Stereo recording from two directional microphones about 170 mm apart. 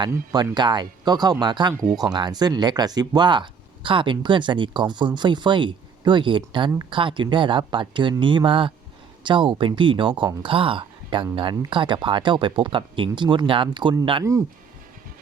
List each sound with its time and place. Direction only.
0.0 s speech: 20° right (ahead or behind)